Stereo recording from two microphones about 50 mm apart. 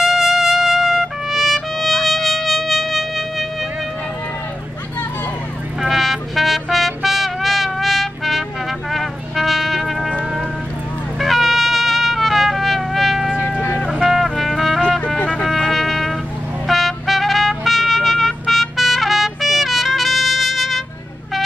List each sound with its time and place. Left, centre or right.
0.0 s trumpet: centre
5.8 s trumpet: centre
11.1 s trumpet: centre
14.0 s music: centre
16.6 s trumpet: centre